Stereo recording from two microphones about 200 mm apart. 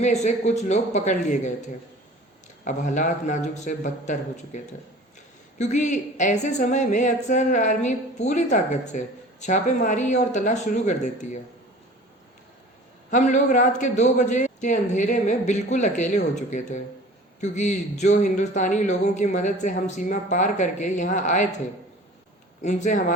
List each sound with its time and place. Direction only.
0.0 s a woman's voice: 35° left (ahead or behind)
2.6 s a woman's voice: 40° left (ahead or behind)
13.1 s a woman's voice: 40° left (ahead or behind)
17.4 s a woman's voice: 35° left (ahead or behind)
22.6 s a woman's voice: 35° left (ahead or behind)